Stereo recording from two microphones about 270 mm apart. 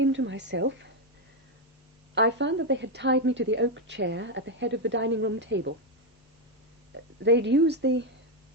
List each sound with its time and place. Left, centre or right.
0.0 s a woman's voice: right
2.1 s a woman's voice: right
6.9 s speech: right